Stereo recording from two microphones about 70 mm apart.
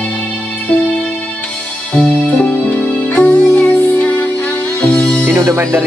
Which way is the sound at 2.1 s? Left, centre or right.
Centre.